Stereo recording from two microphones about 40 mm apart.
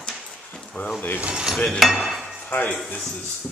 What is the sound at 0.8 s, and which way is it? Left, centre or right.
Speech, left.